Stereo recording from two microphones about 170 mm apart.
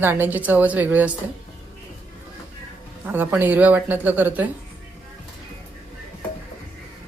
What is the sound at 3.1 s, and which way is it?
A woman's voice, 10° right (ahead or behind).